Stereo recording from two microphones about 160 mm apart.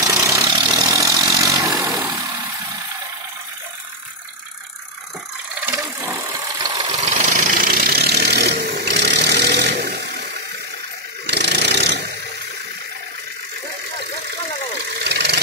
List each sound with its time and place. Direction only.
0.0 s vehicle: 20° right (ahead or behind)
5.7 s vehicle: 20° right (ahead or behind)
6.6 s engine: 30° right (ahead or behind)
7.0 s vehicle: 45° right (ahead or behind); by 10.0 s 90° right
11.2 s a sound: 90° right
15.0 s engine: 90° right